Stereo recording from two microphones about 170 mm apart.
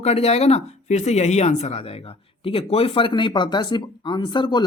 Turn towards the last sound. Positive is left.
turn(degrees=25)  # may be behind; listen again after turning